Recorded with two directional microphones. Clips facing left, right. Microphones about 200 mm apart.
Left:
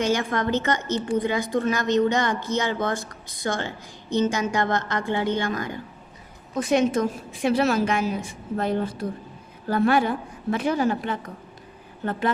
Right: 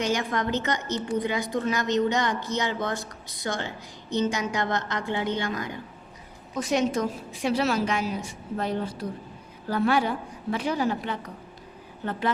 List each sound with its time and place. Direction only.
0.0 s a woman's voice: 55° left (ahead or behind)